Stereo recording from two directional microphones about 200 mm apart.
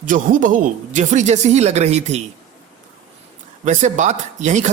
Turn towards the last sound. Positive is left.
turn(degrees=-35)  # may be behind; listen again after turning